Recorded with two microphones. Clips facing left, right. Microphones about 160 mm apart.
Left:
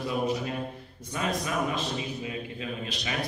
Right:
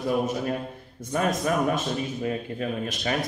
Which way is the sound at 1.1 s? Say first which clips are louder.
Right 6 dB; 50° right (ahead or behind).